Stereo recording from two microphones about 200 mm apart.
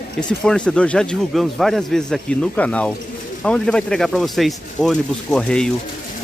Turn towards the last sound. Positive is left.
turn(degrees=5)  # may be behind; listen again after turning